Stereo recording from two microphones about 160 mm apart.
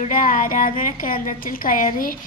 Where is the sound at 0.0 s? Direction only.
60° left (ahead or behind).